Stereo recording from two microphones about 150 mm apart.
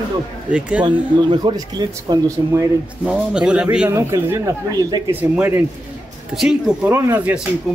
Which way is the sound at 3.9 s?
20° right (ahead or behind).